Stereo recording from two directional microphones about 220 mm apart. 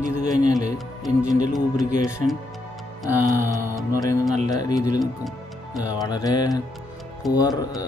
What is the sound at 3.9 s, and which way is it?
A man's voice, 15° left (ahead or behind).